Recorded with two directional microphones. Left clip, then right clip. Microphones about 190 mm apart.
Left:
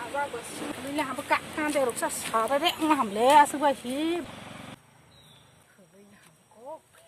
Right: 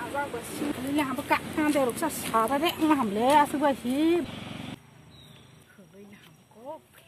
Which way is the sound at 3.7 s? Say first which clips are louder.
Right 4 dB; 25° left (ahead or behind).